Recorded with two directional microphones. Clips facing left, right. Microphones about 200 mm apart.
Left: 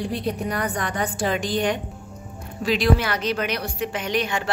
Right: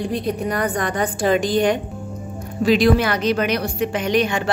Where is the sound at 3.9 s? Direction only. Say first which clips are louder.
Right 7 dB; 60° right (ahead or behind).